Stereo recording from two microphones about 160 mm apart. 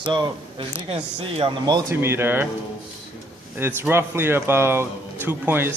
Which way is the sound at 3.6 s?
15° right (ahead or behind).